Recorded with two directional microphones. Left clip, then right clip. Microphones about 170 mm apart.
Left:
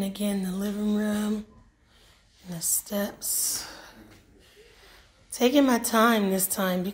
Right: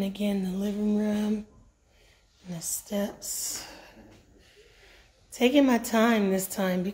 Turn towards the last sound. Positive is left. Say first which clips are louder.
# left 1 dB
turn(degrees=-10)  # may be behind; listen again after turning